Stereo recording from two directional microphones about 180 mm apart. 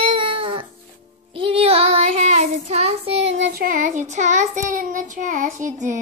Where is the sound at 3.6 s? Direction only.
50° right (ahead or behind).